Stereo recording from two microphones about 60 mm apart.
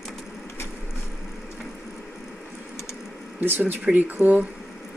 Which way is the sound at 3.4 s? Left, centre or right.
Right.